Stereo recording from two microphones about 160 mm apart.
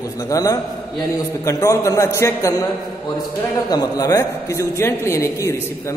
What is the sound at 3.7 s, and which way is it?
A man's voice, 20° left (ahead or behind).